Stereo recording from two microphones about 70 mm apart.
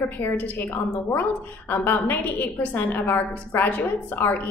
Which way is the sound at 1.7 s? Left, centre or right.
Left.